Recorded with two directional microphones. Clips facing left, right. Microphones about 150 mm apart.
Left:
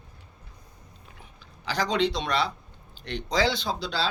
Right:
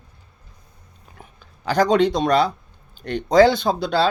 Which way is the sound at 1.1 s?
50° right (ahead or behind).